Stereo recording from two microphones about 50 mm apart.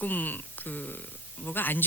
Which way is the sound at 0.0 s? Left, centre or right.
Left.